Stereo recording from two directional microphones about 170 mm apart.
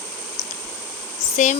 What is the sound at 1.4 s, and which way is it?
Speech, 45° left (ahead or behind).